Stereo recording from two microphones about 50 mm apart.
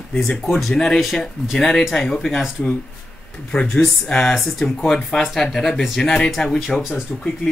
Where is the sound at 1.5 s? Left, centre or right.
Centre.